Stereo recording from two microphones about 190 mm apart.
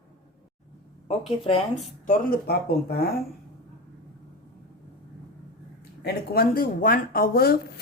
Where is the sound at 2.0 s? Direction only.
50° left (ahead or behind).